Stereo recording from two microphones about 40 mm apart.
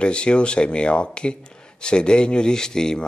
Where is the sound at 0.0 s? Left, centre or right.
Left.